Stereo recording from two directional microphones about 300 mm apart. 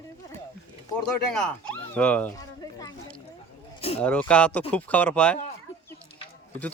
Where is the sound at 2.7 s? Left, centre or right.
Centre.